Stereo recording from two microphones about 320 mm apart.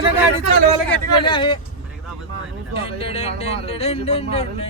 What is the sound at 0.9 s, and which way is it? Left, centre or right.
Speech, centre.